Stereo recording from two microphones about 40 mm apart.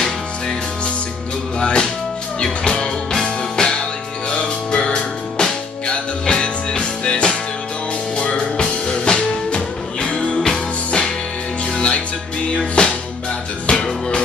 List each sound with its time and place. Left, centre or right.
1.6 s music: left
8.4 s music: left
10.2 s music: left
11.7 s music: left